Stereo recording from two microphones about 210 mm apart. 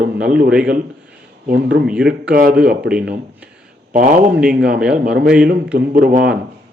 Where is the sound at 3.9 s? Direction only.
40° right (ahead or behind).